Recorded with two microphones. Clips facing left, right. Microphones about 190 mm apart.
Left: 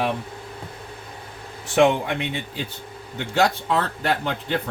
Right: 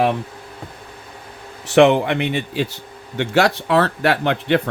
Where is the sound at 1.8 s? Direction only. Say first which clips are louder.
Right 5 dB; 70° right (ahead or behind).